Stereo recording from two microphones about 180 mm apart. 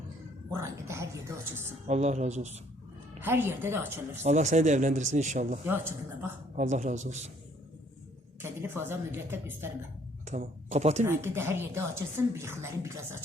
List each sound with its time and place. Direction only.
0.5 s a woman's voice: 15° right (ahead or behind)
1.9 s speech: 40° right (ahead or behind)
3.2 s a woman's voice: 10° right (ahead or behind)
4.2 s speech: 40° right (ahead or behind)
5.6 s a woman's voice: 15° right (ahead or behind)
6.6 s speech: 40° right (ahead or behind)
8.4 s a woman's voice: 10° right (ahead or behind)
10.2 s speech: 40° right (ahead or behind)
11.0 s a woman's voice: 15° right (ahead or behind)